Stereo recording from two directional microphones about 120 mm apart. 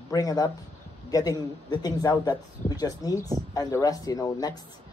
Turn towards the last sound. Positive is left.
turn(degrees=30)  # may be behind; listen again after turning